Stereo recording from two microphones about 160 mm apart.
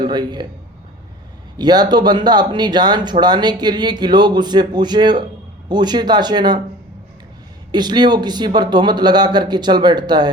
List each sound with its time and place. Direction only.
0.0 s a man's voice: 25° right (ahead or behind)
1.5 s speech: 25° right (ahead or behind)
7.7 s speech: 25° right (ahead or behind)